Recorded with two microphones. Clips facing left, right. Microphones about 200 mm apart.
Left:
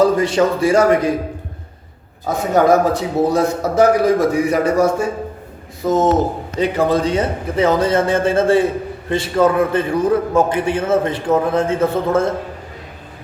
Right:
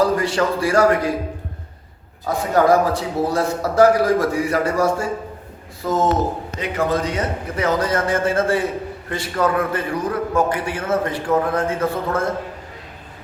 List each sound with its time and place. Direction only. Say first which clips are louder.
0.0 s a man's voice: left 4 dB; 20° left (ahead or behind)
2.2 s a man's voice: left 2 dB; 20° left (ahead or behind)
6.6 s a man's voice: left 6 dB; 30° left (ahead or behind)